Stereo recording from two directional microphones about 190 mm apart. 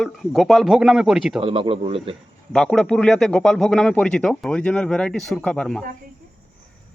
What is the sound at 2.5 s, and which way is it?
Speech, 5° left (ahead or behind).